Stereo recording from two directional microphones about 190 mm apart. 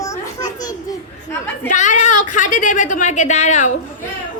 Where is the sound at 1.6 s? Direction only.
40° left (ahead or behind).